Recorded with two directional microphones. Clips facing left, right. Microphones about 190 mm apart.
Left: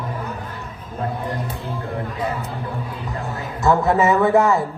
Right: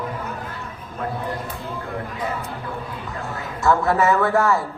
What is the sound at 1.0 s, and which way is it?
Speech, 35° left (ahead or behind).